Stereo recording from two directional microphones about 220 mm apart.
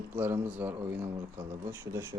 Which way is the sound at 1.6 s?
10° right (ahead or behind).